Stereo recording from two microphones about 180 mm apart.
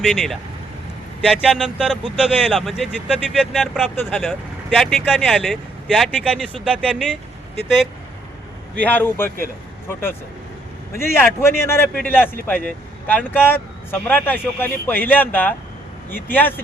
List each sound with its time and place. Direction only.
0.0 s speech: centre (ahead or behind)
8.8 s a man's voice: 10° left (ahead or behind)